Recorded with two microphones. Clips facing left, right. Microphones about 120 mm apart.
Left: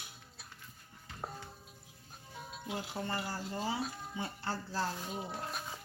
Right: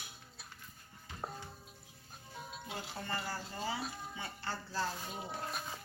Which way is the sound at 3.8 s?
Centre (ahead or behind).